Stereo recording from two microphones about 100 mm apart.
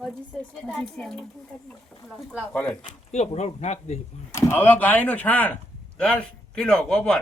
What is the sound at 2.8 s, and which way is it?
Speech, 90° left.